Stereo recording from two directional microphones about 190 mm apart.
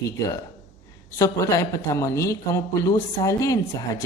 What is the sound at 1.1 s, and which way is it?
A man's voice, 15° left (ahead or behind).